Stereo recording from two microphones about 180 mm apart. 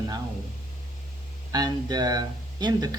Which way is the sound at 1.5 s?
20° right (ahead or behind).